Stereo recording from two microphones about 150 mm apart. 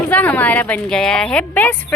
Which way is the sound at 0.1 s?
10° left (ahead or behind).